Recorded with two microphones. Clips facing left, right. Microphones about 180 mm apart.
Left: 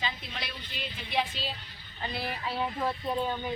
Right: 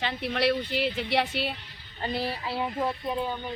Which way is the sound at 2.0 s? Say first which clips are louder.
Right 4 dB; 40° right (ahead or behind).